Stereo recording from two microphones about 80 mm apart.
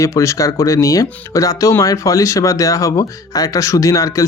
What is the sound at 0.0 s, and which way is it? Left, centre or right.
Speech, left.